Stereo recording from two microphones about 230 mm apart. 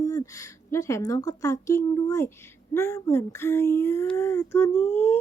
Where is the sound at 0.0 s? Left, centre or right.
Centre.